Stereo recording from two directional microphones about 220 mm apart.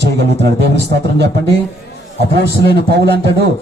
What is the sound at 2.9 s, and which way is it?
Speech, 50° right (ahead or behind).